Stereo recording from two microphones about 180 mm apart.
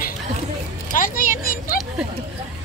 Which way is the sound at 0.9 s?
50° left (ahead or behind).